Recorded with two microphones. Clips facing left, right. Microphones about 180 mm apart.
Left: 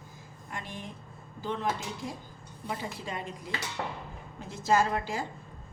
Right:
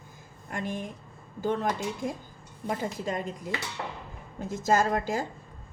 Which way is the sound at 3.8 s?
35° left (ahead or behind).